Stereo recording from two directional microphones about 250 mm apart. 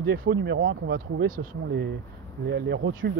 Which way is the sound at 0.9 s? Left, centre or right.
Right.